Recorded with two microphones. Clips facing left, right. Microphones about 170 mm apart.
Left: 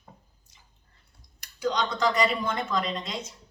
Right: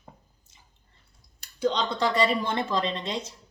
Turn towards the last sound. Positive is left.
turn(degrees=-30)  # may be behind; listen again after turning